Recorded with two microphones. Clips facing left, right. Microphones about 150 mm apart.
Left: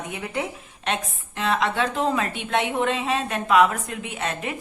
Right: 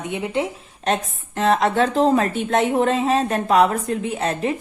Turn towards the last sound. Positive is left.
turn(degrees=-35)  # may be behind; listen again after turning